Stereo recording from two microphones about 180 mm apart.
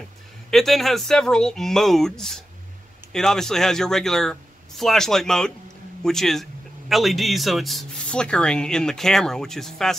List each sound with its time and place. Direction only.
0.5 s speech: centre (ahead or behind)